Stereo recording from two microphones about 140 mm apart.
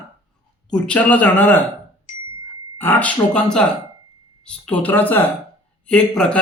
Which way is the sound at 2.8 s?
10° left (ahead or behind).